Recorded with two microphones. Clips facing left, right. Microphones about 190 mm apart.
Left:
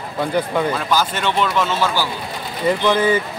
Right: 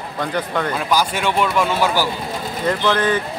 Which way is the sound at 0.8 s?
10° right (ahead or behind).